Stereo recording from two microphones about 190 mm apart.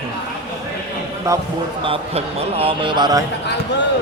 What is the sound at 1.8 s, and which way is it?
Speech, 30° right (ahead or behind).